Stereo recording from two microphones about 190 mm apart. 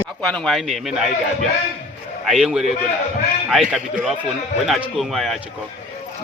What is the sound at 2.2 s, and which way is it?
Speech, 5° right (ahead or behind).